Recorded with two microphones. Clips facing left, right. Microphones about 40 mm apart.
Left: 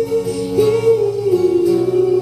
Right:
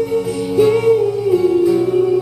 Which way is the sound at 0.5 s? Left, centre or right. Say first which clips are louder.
Right 1 dB; centre.